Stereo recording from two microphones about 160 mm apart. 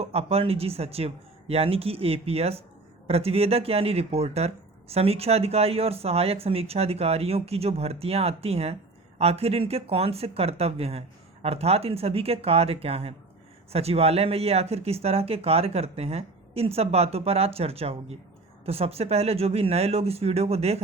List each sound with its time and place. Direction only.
0.0 s speech: 40° right (ahead or behind)